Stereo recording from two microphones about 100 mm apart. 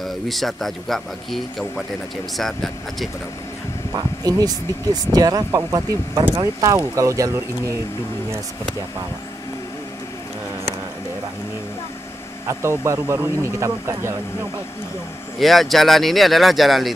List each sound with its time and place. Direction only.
0.0 s speech: centre (ahead or behind)
3.9 s speech: 40° right (ahead or behind)
12.4 s speech: 30° right (ahead or behind)
15.3 s speech: centre (ahead or behind)